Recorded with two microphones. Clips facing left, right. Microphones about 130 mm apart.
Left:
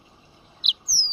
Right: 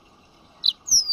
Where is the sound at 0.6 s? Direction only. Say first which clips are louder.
Left 1 dB; 40° right (ahead or behind).